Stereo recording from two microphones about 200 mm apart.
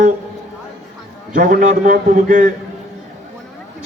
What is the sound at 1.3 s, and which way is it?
A man's voice, 45° right (ahead or behind).